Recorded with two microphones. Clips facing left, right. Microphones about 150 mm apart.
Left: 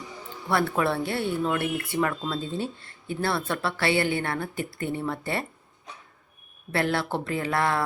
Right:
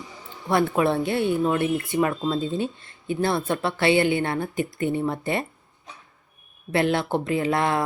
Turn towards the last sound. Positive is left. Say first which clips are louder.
# right 3 dB
turn(degrees=-20)  # may be behind; listen again after turning